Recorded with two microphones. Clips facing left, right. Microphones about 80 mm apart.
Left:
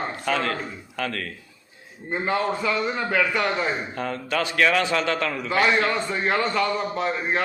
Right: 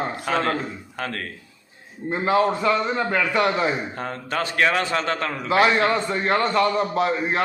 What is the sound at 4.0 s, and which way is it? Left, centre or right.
A man's voice, right.